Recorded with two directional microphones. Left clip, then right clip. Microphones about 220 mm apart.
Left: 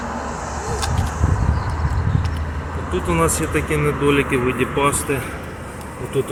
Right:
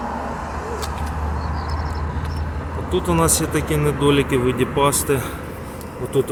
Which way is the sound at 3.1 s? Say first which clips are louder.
Left 1 dB; 15° right (ahead or behind).